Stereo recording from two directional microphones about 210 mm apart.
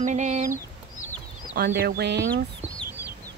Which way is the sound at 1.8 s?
50° right (ahead or behind).